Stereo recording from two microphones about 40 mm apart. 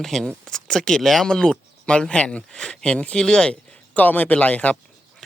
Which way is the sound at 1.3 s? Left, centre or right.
Centre.